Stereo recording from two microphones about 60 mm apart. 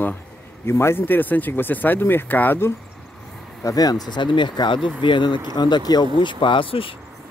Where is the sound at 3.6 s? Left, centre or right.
Left.